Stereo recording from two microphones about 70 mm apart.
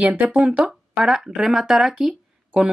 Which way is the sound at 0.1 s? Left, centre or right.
Right.